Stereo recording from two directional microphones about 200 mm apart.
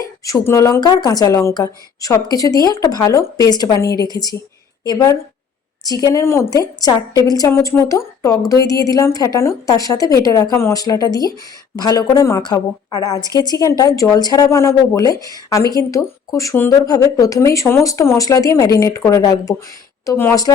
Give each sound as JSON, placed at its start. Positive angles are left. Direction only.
{"t": 0.0, "sound": "a woman's voice", "side_deg": 15}